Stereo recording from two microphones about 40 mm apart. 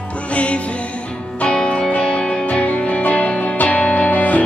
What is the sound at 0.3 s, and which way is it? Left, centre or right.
Music, left.